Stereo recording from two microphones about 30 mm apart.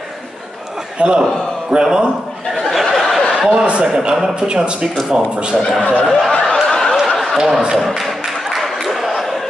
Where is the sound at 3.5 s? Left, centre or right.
Right.